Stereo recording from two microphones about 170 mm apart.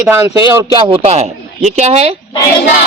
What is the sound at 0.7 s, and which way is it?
Speech, 30° right (ahead or behind).